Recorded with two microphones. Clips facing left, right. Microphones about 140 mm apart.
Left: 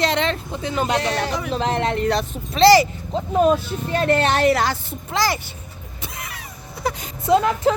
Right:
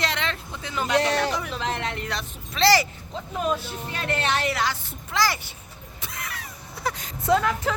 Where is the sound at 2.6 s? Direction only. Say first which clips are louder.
Left 7 dB; 15° left (ahead or behind).